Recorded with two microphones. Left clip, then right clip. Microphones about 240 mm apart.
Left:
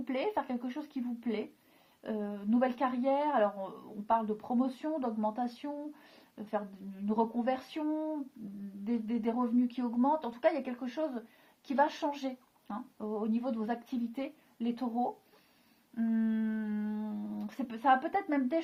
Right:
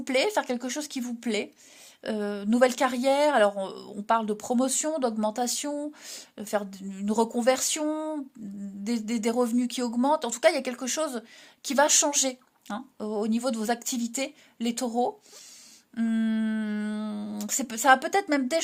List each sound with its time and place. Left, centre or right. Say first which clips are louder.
0.0 s speech: right 9 dB; right